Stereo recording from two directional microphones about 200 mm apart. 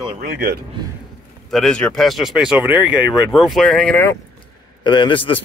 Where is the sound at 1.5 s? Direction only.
5° left (ahead or behind).